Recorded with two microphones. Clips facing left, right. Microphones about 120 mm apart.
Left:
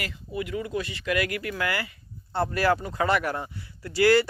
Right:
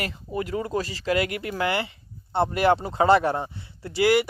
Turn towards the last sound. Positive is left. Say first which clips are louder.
# even
turn(degrees=-20)  # may be behind; listen again after turning